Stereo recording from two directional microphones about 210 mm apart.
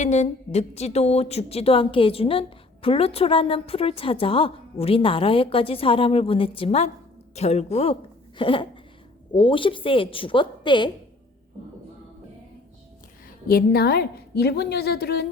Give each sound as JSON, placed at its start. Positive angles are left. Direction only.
{"t": 0.0, "sound": "a woman's voice", "side_deg": 35}
{"t": 13.5, "sound": "a woman's voice", "side_deg": 45}